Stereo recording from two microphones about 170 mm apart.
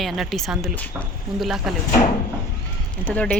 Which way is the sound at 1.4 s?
Centre (ahead or behind).